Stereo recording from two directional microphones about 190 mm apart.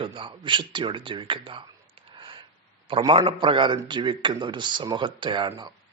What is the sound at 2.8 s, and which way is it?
Speech, 25° right (ahead or behind).